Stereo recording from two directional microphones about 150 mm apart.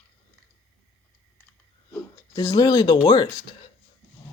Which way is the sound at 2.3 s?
25° left (ahead or behind).